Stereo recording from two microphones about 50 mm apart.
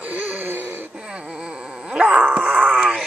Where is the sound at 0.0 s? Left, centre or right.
Right.